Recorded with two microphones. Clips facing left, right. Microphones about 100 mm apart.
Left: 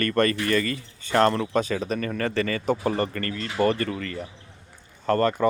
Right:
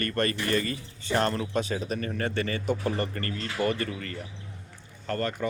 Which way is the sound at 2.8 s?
50° left (ahead or behind).